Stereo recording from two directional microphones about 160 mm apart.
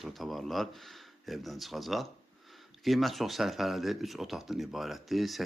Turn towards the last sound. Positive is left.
turn(degrees=0)  # may be behind; listen again after turning